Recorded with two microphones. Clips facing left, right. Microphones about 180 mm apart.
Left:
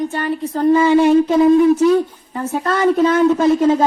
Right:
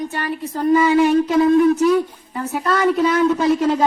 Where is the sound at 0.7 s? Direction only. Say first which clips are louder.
Left 2 dB; 30° left (ahead or behind).